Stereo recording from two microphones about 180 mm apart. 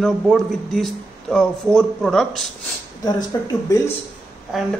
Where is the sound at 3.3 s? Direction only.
20° left (ahead or behind).